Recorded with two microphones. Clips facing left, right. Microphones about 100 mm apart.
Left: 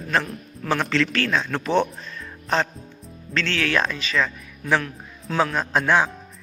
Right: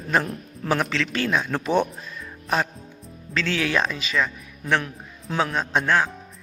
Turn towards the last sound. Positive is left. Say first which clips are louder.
# left 2 dB
turn(degrees=5)  # may be behind; listen again after turning